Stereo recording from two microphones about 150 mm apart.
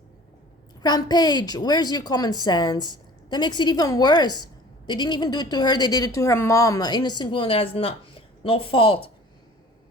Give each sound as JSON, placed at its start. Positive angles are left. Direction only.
{"t": 0.8, "sound": "a woman's voice", "side_deg": 25}